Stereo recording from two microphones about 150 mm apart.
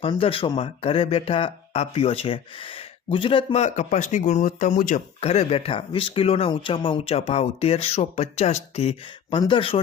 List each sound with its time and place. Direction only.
0.0 s speech: 40° left (ahead or behind); by 5.0 s 60° left (ahead or behind)
5.2 s speech: 40° left (ahead or behind)